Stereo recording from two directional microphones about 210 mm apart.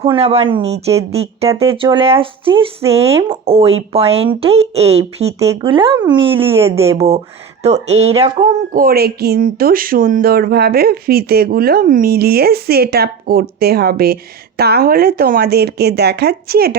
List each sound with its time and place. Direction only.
0.0 s speech: 30° right (ahead or behind); by 16.7 s 45° right (ahead or behind)